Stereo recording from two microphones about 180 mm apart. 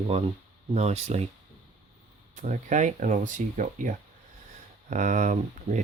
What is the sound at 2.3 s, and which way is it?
Speech, 45° right (ahead or behind).